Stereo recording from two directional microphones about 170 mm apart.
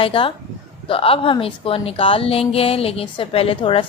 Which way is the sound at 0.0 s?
30° left (ahead or behind).